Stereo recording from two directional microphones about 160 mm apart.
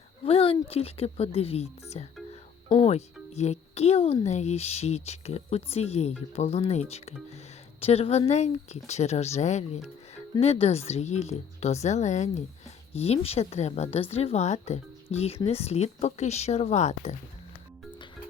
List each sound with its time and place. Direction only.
0.3 s a woman's voice: 35° left (ahead or behind)
2.3 s music: 30° left (ahead or behind)
2.8 s a woman's voice: 45° left (ahead or behind)